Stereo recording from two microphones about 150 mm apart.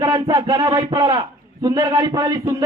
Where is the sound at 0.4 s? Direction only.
30° right (ahead or behind).